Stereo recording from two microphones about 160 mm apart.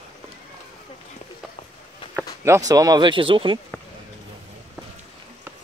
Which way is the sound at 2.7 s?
25° right (ahead or behind).